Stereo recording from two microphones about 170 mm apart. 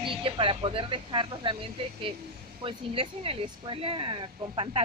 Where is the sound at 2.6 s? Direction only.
30° right (ahead or behind).